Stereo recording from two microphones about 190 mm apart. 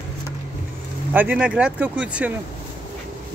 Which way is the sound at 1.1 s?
10° right (ahead or behind).